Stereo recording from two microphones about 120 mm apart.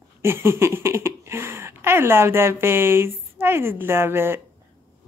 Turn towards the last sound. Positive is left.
turn(degrees=-20)  # may be behind; listen again after turning